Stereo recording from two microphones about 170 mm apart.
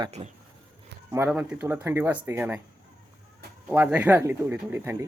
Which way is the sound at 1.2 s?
5° right (ahead or behind).